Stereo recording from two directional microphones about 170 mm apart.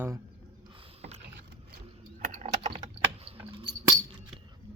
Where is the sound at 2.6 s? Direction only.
30° right (ahead or behind).